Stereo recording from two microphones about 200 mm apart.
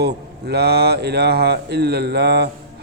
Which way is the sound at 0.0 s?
55° right (ahead or behind).